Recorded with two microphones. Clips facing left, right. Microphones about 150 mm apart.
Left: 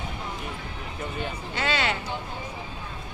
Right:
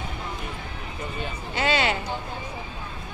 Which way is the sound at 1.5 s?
15° right (ahead or behind).